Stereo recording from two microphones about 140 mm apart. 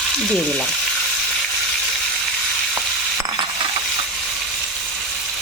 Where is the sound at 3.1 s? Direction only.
30° right (ahead or behind).